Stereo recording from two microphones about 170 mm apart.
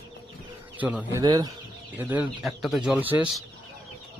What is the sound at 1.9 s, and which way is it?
Speech, 10° right (ahead or behind).